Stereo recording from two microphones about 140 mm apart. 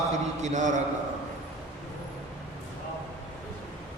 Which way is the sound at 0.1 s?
60° right (ahead or behind).